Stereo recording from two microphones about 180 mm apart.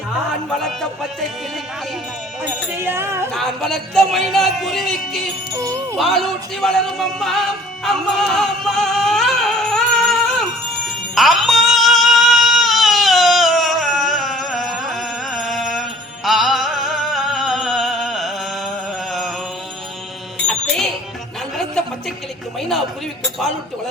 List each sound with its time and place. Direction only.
2.4 s speech: 10° right (ahead or behind)
3.3 s speech: centre (ahead or behind)
5.5 s speech: 15° right (ahead or behind)
6.0 s speech: centre (ahead or behind)
7.9 s music: centre (ahead or behind)
20.5 s music: centre (ahead or behind)